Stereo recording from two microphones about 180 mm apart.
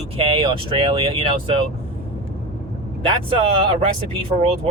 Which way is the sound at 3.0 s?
30° right (ahead or behind).